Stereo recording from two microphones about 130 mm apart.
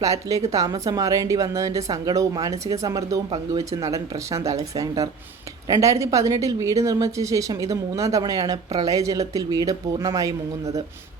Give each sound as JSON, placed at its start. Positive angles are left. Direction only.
{"t": 0.0, "sound": "speech", "side_deg": -25}
{"t": 3.2, "sound": "speech", "side_deg": -40}
{"t": 3.6, "sound": "speech", "side_deg": -25}